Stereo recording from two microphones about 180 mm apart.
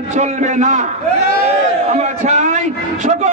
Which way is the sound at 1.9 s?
40° right (ahead or behind).